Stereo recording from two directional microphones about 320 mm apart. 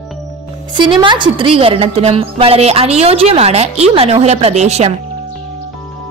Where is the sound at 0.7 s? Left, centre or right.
Centre.